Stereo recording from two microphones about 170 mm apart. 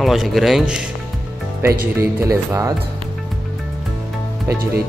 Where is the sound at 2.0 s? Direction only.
15° right (ahead or behind).